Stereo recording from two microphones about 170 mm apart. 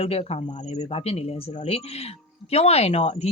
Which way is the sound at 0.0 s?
35° left (ahead or behind).